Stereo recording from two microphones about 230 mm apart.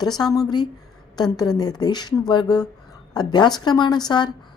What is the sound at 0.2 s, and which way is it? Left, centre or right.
A woman's voice, centre.